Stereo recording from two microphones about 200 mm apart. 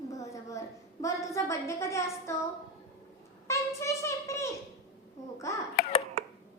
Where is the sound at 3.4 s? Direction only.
15° left (ahead or behind).